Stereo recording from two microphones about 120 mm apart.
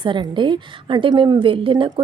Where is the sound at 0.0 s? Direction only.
45° right (ahead or behind).